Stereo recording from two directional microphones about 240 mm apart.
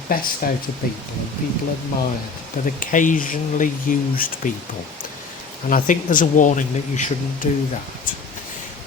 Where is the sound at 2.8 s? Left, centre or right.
Left.